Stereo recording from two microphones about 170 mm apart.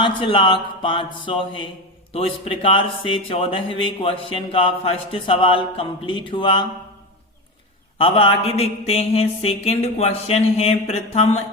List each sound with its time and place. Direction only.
0.0 s speech: 30° left (ahead or behind)
7.9 s speech: 35° left (ahead or behind)